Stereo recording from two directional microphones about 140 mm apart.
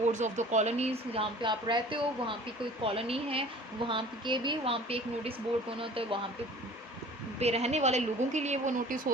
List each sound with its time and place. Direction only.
0.0 s speech: 60° right (ahead or behind); by 6.1 s 40° right (ahead or behind)
7.3 s a woman's voice: 50° right (ahead or behind); by 9.1 s 65° right (ahead or behind)